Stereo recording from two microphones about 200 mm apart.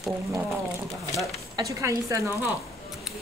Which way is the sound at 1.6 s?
15° right (ahead or behind).